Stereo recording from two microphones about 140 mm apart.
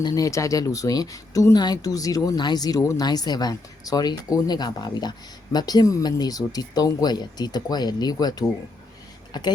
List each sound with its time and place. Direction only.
0.0 s speech: 25° left (ahead or behind)